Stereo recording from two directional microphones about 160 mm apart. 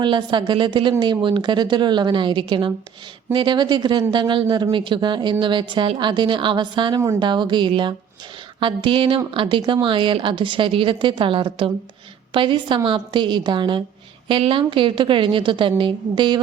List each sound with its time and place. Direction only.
0.0 s a woman's voice: 30° right (ahead or behind)